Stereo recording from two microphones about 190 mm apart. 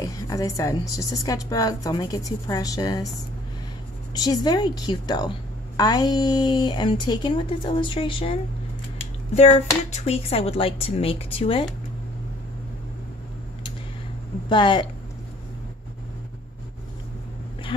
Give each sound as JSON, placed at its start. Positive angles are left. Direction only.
{"t": 0.0, "sound": "a woman's voice", "side_deg": 20}
{"t": 4.1, "sound": "a woman's voice", "side_deg": 20}
{"t": 9.9, "sound": "a woman's voice", "side_deg": 30}
{"t": 14.5, "sound": "a woman's voice", "side_deg": 25}